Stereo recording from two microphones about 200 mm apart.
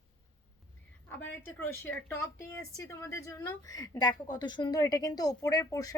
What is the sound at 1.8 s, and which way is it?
A woman's voice, 10° left (ahead or behind).